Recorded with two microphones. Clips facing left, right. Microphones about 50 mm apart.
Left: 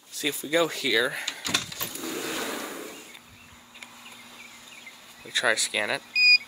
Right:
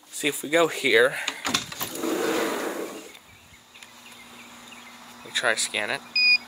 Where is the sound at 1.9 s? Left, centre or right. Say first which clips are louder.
Right 9 dB; right.